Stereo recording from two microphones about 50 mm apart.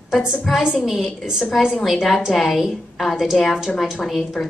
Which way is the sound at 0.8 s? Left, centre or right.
Centre.